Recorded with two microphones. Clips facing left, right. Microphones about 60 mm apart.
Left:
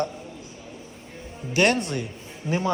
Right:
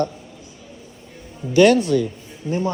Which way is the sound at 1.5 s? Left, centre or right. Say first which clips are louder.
Right 8 dB; left.